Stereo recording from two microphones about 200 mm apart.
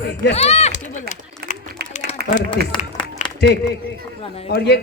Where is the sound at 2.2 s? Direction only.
50° right (ahead or behind).